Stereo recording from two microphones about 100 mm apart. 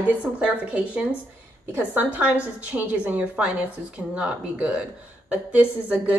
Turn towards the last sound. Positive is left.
turn(degrees=-10)  # may be behind; listen again after turning